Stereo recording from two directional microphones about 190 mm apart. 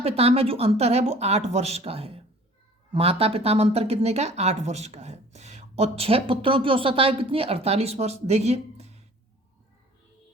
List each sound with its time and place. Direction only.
0.0 s speech: 30° right (ahead or behind)